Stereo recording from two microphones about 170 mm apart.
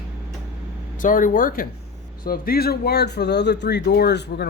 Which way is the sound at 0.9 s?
50° left (ahead or behind).